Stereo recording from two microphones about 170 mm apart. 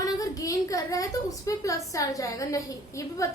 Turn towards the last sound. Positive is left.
turn(degrees=20)  # may be behind; listen again after turning